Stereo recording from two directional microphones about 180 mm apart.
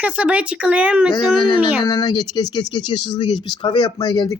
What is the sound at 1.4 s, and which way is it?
Speech, 30° left (ahead or behind).